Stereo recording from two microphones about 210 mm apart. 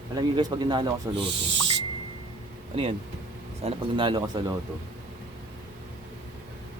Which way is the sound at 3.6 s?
25° right (ahead or behind).